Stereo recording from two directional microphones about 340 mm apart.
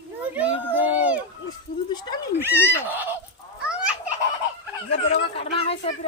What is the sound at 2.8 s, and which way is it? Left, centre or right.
Fowl, centre.